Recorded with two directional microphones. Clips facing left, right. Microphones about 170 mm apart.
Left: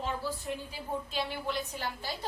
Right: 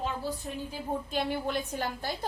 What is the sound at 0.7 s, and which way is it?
A woman's voice, 50° right (ahead or behind).